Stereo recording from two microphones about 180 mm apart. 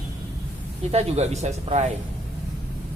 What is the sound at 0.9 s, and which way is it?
Speech, 35° right (ahead or behind).